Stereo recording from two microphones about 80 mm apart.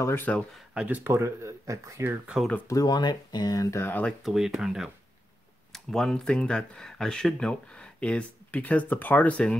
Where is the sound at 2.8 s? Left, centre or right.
Left.